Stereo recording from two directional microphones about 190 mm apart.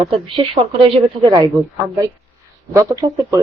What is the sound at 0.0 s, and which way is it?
A woman's voice, 30° right (ahead or behind).